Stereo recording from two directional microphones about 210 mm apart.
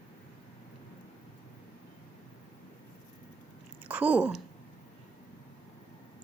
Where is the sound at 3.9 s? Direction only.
5° right (ahead or behind).